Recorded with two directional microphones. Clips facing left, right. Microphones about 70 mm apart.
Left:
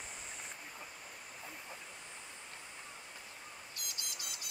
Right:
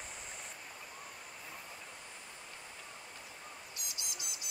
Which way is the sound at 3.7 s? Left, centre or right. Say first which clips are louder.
Even; right.